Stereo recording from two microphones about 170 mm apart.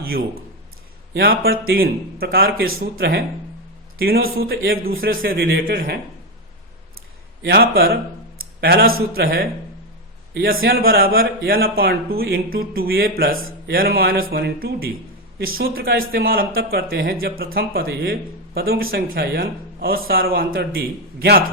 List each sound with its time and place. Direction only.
1.1 s speech: 65° right (ahead or behind)
7.4 s speech: 70° right (ahead or behind)